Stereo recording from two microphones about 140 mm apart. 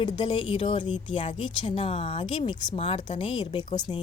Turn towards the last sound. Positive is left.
turn(degrees=30)  # may be behind; listen again after turning